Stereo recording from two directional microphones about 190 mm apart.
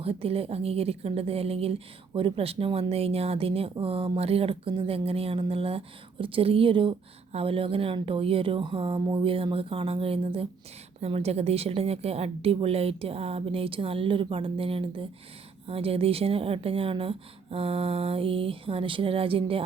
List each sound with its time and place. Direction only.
0.0 s speech: 30° right (ahead or behind)